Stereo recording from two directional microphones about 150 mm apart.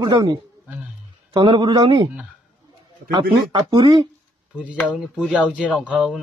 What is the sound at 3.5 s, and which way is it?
Speech, 35° right (ahead or behind).